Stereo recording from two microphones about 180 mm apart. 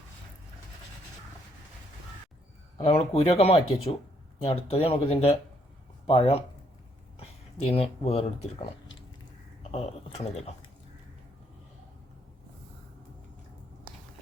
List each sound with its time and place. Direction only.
2.7 s speech: 35° left (ahead or behind)
9.7 s speech: 35° left (ahead or behind)